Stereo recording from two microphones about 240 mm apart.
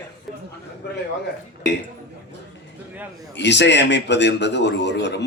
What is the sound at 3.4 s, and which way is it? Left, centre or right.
A man's voice, left.